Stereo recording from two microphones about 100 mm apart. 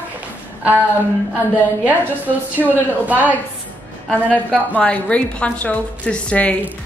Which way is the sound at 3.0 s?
15° right (ahead or behind).